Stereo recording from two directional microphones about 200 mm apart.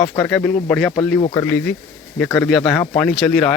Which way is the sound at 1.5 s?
5° left (ahead or behind).